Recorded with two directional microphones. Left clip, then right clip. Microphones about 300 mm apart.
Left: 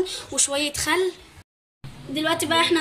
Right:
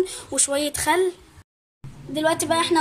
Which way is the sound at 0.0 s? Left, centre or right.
Right.